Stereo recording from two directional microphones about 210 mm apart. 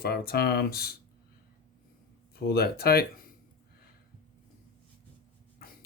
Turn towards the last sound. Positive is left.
turn(degrees=45)  # may be behind; listen again after turning